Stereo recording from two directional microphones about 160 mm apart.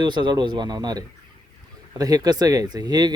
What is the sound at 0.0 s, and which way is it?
Speech, 30° right (ahead or behind).